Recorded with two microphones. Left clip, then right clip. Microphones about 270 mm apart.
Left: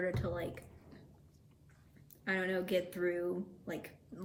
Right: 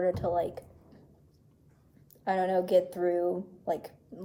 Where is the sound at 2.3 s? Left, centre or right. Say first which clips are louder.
Right 9 dB; centre.